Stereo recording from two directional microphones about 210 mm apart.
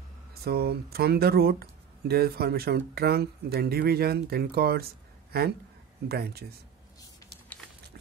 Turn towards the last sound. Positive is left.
turn(degrees=-50)  # may be behind; listen again after turning